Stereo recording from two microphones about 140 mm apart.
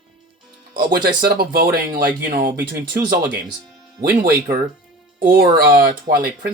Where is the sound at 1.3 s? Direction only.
90° right.